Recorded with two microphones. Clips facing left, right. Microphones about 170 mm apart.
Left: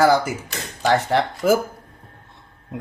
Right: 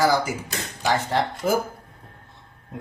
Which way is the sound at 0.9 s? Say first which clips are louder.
Left 4 dB; 80° left.